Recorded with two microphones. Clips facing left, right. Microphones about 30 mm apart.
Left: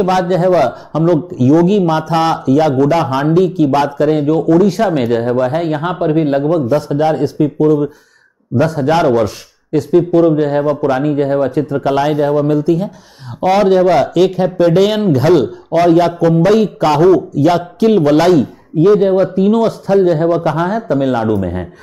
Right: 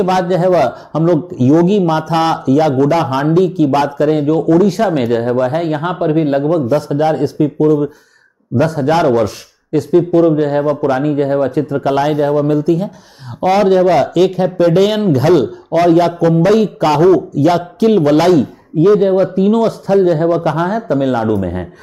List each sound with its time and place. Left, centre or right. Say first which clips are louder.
0.2 s a man's voice: even; centre
9.0 s speech: even; centre